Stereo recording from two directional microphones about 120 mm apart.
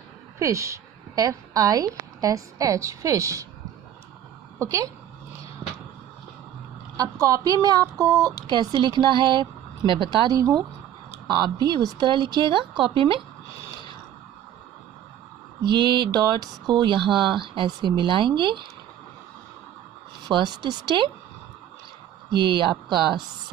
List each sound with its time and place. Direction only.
0.4 s speech: 25° right (ahead or behind)
4.6 s a woman's voice: 25° right (ahead or behind)
7.0 s a woman's voice: 30° right (ahead or behind); by 13.2 s 45° right (ahead or behind)
15.6 s speech: 40° right (ahead or behind)
20.2 s speech: 35° right (ahead or behind)
22.3 s speech: 40° right (ahead or behind)